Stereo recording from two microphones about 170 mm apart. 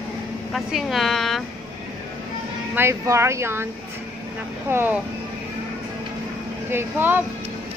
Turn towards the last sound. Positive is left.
turn(degrees=-10)  # may be behind; listen again after turning